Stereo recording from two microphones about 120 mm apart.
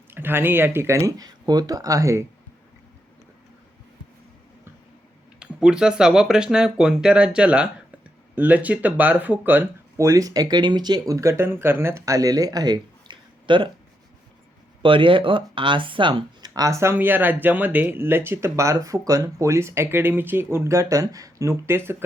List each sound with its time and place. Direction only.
0.1 s speech: 20° right (ahead or behind)
5.4 s speech: 5° right (ahead or behind)
10.1 s speech: 30° right (ahead or behind)
11.1 s speech: 25° right (ahead or behind); by 13.7 s 40° right (ahead or behind)
14.8 s speech: 45° right (ahead or behind)
16.6 s speech: 25° right (ahead or behind)